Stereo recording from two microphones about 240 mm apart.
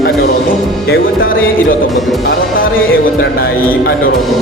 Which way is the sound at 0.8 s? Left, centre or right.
Left.